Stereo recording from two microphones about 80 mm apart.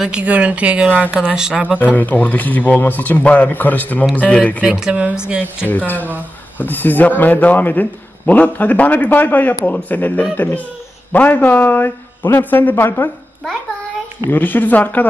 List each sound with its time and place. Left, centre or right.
0.0 s a woman's voice: centre
2.0 s a man's voice: left
4.6 s a woman's voice: centre
5.7 s a man's voice: left
14.3 s a man's voice: left